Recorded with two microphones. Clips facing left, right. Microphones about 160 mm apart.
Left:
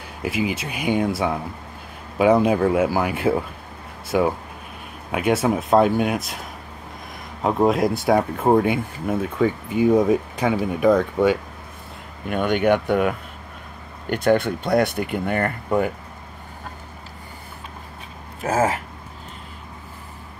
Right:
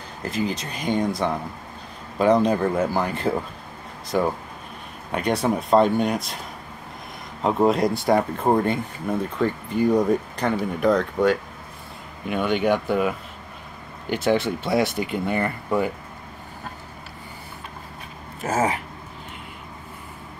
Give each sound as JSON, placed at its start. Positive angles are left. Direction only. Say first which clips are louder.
{"t": 0.2, "sound": "speech", "louder": "left 2 dB", "side_deg": 10}
{"t": 7.4, "sound": "speech", "louder": "left 1 dB", "side_deg": 0}
{"t": 12.4, "sound": "speech", "louder": "left 3 dB", "side_deg": 55}
{"t": 12.8, "sound": "speech", "louder": "left 2 dB", "side_deg": 0}
{"t": 14.1, "sound": "speech", "louder": "left 3 dB", "side_deg": 55}
{"t": 18.5, "sound": "speech", "louder": "left 2 dB", "side_deg": 0}